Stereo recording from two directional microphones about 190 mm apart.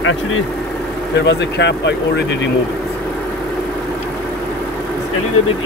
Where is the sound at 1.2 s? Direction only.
65° left (ahead or behind).